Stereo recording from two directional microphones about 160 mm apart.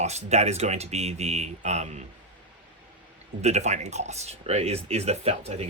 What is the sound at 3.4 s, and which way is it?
Speech, 45° right (ahead or behind).